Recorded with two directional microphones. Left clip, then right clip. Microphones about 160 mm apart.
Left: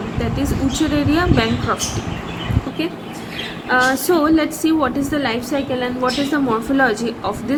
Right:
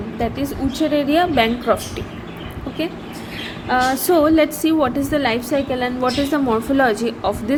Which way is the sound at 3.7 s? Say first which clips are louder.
Left 1 dB; 40° right (ahead or behind).